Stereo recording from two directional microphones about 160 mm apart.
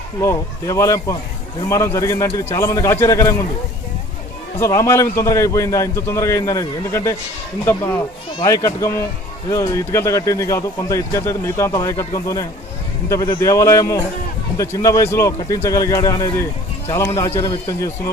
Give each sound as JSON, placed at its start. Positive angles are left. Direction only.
{"t": 0.2, "sound": "a man's voice", "side_deg": 20}
{"t": 4.6, "sound": "a man's voice", "side_deg": 20}